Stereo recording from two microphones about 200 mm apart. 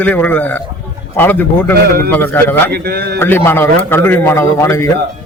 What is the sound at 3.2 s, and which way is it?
Speech, 10° left (ahead or behind).